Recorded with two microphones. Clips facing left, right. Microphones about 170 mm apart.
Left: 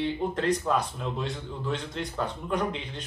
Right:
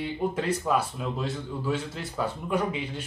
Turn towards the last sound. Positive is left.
turn(degrees=-10)  # may be behind; listen again after turning